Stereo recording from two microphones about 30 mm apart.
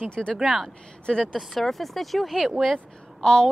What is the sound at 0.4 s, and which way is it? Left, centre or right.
Speech, centre.